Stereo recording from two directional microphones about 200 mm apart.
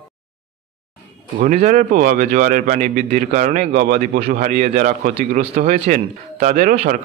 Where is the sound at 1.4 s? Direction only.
40° right (ahead or behind).